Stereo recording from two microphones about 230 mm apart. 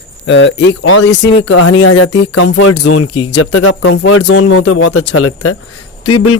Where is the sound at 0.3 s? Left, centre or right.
Left.